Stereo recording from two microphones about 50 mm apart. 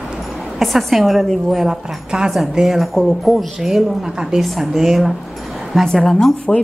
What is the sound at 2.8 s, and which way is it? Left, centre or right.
A woman's voice, centre.